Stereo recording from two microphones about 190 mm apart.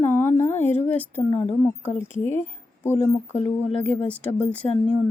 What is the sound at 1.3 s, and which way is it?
Speech, 25° left (ahead or behind).